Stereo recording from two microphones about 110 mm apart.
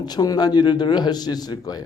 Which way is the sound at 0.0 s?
35° left (ahead or behind).